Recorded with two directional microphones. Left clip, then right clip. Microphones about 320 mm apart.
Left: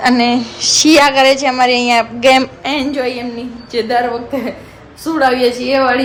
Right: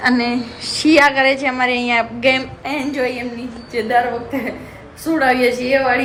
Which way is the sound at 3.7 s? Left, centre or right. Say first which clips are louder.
Left 2 dB; centre.